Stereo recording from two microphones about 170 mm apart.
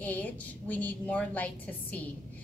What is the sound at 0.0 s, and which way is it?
A woman's voice, 10° left (ahead or behind).